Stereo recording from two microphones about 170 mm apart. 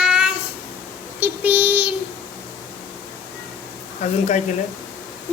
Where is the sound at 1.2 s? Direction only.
5° right (ahead or behind).